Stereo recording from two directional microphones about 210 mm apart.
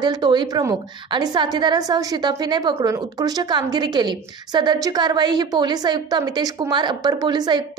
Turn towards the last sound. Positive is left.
turn(degrees=-20)  # may be behind; listen again after turning